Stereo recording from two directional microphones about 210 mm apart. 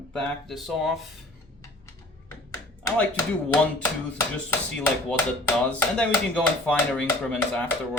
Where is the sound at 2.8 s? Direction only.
5° left (ahead or behind).